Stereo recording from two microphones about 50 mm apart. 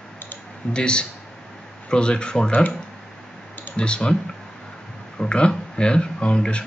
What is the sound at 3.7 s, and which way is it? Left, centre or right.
Speech, centre.